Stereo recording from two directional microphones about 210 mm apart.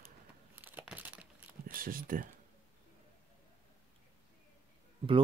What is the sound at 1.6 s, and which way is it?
Speech, 40° right (ahead or behind).